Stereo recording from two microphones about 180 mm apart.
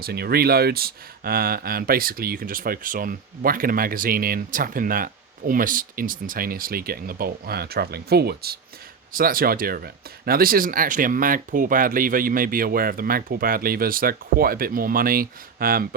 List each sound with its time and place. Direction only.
0.0 s speech: 60° right (ahead or behind)